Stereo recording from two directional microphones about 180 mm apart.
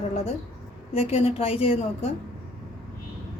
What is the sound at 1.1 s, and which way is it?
Speech, 35° left (ahead or behind).